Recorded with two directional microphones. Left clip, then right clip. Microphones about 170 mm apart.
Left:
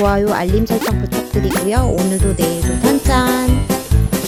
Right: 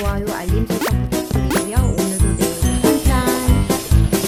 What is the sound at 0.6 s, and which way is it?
Music, centre (ahead or behind).